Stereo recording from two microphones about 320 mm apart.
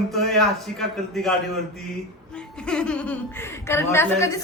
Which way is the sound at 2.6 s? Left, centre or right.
Centre.